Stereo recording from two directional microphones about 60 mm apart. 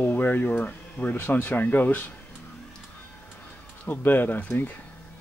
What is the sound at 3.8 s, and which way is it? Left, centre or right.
Speech, left.